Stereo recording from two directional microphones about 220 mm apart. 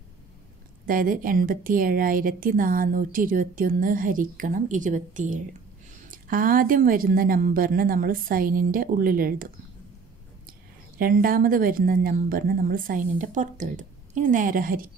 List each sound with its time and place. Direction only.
0.8 s a woman's voice: 40° right (ahead or behind)
11.0 s a woman's voice: 40° right (ahead or behind)